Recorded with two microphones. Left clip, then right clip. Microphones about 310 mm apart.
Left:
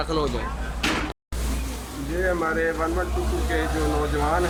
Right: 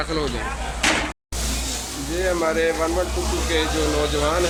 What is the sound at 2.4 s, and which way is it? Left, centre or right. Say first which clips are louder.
Speech: right 3 dB; centre.